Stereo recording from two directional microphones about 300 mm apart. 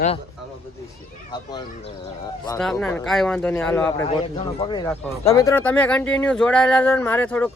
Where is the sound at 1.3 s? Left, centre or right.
Centre.